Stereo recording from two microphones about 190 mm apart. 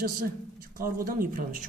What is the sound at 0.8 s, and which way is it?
Speech, 50° right (ahead or behind).